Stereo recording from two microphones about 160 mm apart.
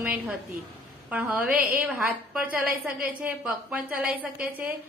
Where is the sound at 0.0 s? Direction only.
5° right (ahead or behind).